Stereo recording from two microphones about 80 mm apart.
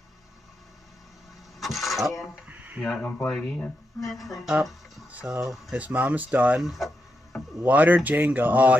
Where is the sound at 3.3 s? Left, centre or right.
Centre.